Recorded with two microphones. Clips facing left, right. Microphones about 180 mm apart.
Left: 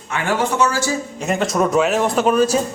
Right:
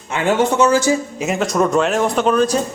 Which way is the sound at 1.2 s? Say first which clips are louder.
Left 2 dB; centre (ahead or behind).